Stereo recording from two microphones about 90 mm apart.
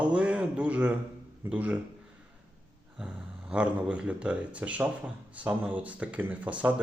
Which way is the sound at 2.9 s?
10° right (ahead or behind).